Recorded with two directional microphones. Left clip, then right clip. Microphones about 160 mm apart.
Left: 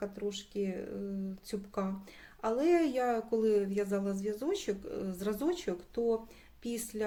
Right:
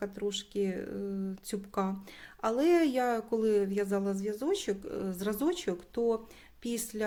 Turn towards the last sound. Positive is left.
turn(degrees=-30)  # may be behind; listen again after turning